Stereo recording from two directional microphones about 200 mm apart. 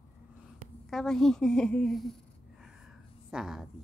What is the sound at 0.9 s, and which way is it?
A woman's voice, centre (ahead or behind).